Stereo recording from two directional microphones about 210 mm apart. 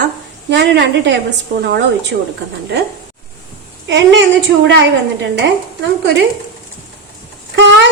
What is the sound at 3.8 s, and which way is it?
Speech, 55° right (ahead or behind).